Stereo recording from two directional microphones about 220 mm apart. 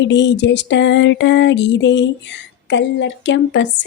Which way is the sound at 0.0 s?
55° left (ahead or behind).